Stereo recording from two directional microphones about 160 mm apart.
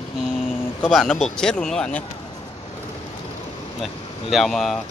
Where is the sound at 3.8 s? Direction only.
Centre (ahead or behind).